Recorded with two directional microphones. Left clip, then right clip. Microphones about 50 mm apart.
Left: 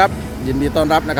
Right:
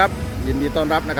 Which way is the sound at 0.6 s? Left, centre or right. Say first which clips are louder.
Left 4 dB; left.